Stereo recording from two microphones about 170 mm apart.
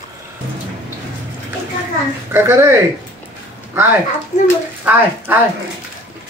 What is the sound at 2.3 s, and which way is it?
Speech, 15° right (ahead or behind).